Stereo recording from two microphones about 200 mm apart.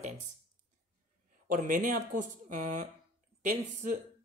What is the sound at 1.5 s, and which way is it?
A man's voice, 40° right (ahead or behind).